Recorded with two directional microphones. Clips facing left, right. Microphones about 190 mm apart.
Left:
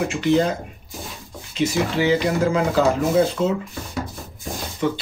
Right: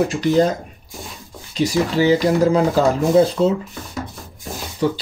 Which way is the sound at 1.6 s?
35° right (ahead or behind).